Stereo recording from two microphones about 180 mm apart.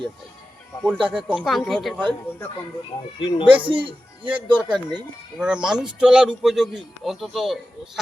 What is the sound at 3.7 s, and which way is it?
Speech, 30° right (ahead or behind).